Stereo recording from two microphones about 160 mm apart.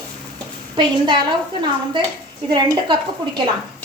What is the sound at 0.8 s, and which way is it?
A woman's voice, 30° right (ahead or behind).